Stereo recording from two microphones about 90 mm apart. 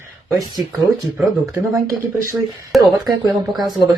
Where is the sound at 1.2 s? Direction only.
35° right (ahead or behind).